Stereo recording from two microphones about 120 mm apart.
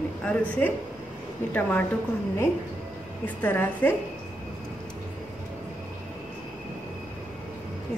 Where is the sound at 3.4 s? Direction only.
15° left (ahead or behind).